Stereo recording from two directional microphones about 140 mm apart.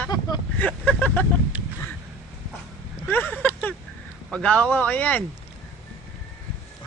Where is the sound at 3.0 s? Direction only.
10° left (ahead or behind).